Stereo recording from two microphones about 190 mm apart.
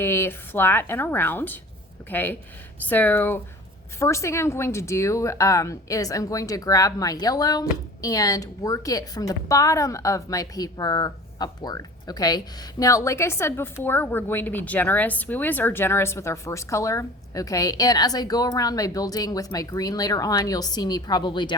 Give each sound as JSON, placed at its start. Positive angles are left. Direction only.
{"t": 0.0, "sound": "a woman's voice", "side_deg": 15}